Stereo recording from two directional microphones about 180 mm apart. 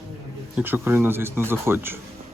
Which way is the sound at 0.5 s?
10° right (ahead or behind).